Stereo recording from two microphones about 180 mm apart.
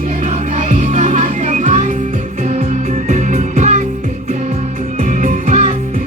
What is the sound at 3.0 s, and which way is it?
Music, 40° right (ahead or behind).